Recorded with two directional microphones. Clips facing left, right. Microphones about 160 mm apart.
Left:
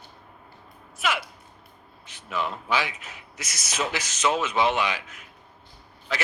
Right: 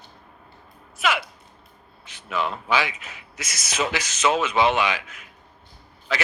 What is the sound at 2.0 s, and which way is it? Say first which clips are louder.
A man's voice: right 3 dB; 90° right.